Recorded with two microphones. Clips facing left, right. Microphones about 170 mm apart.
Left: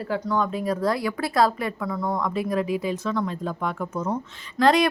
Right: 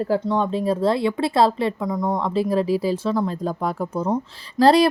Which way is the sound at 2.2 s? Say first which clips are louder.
Right 5 dB; 30° right (ahead or behind).